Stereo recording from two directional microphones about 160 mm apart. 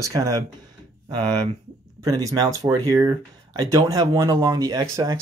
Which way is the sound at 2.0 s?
20° right (ahead or behind).